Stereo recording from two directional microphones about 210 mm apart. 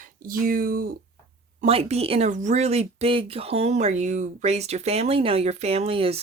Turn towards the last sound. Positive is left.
turn(degrees=-25)  # may be behind; listen again after turning